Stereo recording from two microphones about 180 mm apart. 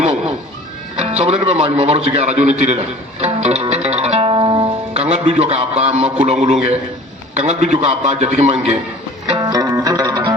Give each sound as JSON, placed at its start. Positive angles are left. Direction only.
{"t": 0.0, "sound": "music", "side_deg": -35}
{"t": 0.9, "sound": "a man's voice", "side_deg": -35}
{"t": 3.8, "sound": "music", "side_deg": -35}
{"t": 5.0, "sound": "a man's voice", "side_deg": -35}
{"t": 9.3, "sound": "music", "side_deg": -20}